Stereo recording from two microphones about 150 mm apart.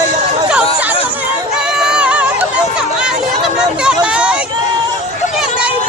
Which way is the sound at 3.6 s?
5° right (ahead or behind).